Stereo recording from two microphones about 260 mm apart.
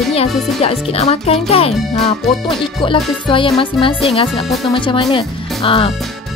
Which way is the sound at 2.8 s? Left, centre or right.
Centre.